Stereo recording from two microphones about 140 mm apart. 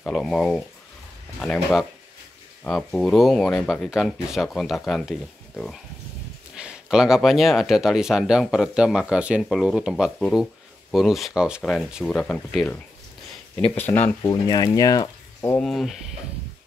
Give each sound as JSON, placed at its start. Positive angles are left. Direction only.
{"t": 0.0, "sound": "speech", "side_deg": 5}
{"t": 13.7, "sound": "speech", "side_deg": 15}
{"t": 14.2, "sound": "speech", "side_deg": 30}
{"t": 15.5, "sound": "speech", "side_deg": 0}